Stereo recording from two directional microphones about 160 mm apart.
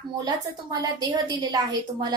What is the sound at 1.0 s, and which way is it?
A woman's voice, 25° right (ahead or behind).